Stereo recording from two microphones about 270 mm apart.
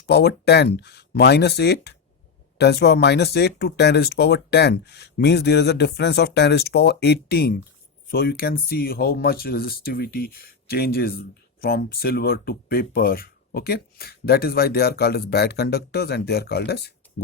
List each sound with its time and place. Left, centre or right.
0.1 s speech: left